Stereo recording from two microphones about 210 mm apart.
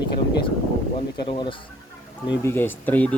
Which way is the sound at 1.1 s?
20° left (ahead or behind).